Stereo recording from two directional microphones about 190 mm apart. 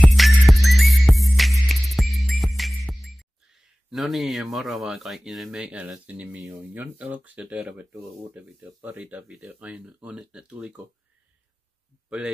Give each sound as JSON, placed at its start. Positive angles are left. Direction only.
{"t": 0.0, "sound": "music", "side_deg": 0}